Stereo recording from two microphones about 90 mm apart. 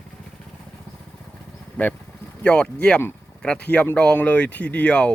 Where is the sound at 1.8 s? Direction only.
15° left (ahead or behind).